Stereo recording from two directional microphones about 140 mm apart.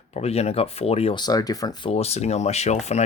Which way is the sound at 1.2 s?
30° left (ahead or behind).